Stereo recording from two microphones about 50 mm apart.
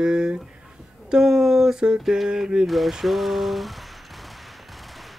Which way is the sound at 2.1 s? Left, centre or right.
Centre.